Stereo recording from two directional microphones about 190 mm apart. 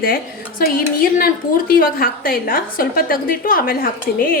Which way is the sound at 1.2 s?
50° left (ahead or behind).